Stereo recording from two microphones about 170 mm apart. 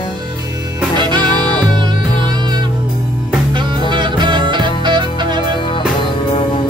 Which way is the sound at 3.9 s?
25° right (ahead or behind).